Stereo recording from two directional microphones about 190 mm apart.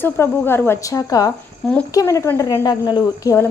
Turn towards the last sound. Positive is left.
turn(degrees=15)  # may be behind; listen again after turning